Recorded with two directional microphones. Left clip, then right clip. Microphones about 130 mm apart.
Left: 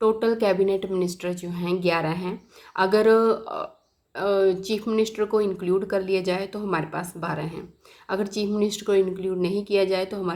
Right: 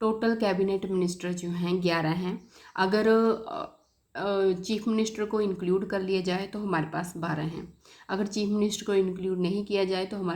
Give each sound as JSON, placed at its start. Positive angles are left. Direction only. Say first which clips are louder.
{"t": 0.0, "sound": "speech", "louder": "left 5 dB", "side_deg": 25}